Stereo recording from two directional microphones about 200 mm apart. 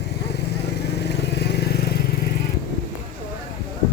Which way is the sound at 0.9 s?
60° left (ahead or behind).